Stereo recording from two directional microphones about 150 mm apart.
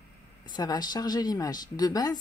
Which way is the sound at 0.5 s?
25° left (ahead or behind).